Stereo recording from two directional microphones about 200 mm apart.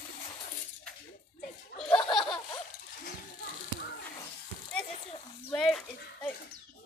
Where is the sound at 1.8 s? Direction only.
5° left (ahead or behind).